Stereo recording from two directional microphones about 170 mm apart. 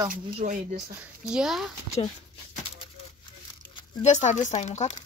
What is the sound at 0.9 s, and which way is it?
Speech, 5° right (ahead or behind).